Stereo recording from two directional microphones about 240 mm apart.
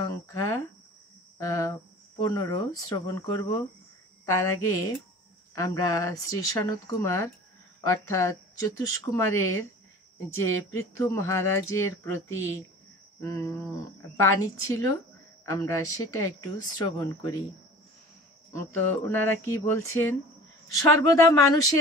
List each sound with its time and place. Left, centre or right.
0.0 s cricket: centre
2.2 s speech: centre
18.5 s speech: centre